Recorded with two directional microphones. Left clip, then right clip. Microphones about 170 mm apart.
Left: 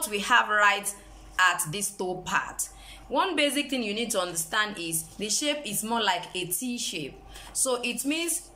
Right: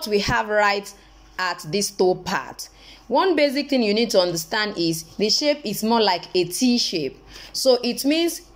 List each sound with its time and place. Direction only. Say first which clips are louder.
0.0 s a woman's voice: right 2 dB; 30° right (ahead or behind)